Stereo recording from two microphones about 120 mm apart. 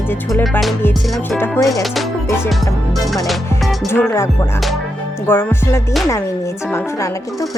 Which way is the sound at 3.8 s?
20° left (ahead or behind).